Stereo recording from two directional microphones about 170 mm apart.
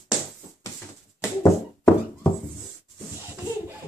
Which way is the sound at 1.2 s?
15° left (ahead or behind).